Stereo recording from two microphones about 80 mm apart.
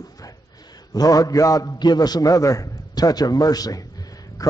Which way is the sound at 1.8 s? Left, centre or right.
Left.